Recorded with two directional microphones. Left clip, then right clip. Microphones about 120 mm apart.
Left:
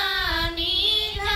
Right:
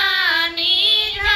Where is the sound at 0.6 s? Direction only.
35° left (ahead or behind).